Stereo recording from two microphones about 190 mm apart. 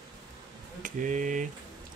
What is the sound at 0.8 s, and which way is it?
Speech, 40° right (ahead or behind).